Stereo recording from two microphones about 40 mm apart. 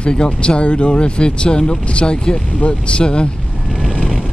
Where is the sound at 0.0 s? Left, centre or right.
Left.